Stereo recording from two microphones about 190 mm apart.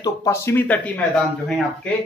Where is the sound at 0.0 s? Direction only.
15° left (ahead or behind).